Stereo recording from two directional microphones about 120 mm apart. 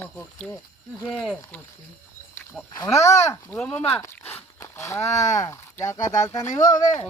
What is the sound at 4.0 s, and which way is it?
Walk, 20° left (ahead or behind).